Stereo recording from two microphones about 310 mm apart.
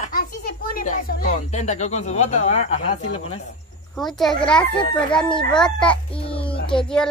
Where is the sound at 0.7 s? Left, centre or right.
Left.